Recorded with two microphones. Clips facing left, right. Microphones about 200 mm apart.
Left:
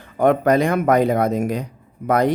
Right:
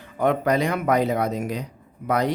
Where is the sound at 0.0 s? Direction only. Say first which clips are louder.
Left 5 dB; 50° left (ahead or behind).